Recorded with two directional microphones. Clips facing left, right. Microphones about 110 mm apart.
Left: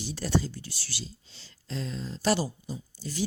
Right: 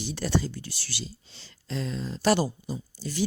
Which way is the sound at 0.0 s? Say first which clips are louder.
Right 1 dB; 75° right (ahead or behind).